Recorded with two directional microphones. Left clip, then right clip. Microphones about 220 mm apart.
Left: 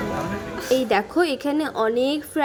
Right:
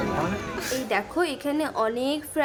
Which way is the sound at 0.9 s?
20° left (ahead or behind).